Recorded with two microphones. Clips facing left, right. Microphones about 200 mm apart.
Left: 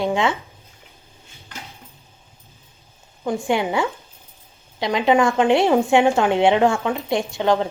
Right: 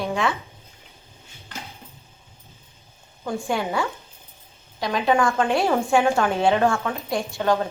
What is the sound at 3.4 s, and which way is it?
A woman's voice, 15° left (ahead or behind).